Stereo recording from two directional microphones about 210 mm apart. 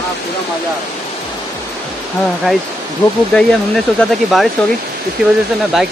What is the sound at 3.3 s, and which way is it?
Speech, 5° left (ahead or behind).